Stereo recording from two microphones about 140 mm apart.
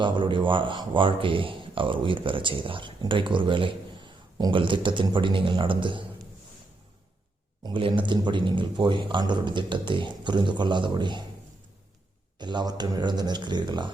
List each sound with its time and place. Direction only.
0.0 s speech: 35° right (ahead or behind)
7.6 s speech: 35° right (ahead or behind)
12.4 s speech: 30° right (ahead or behind)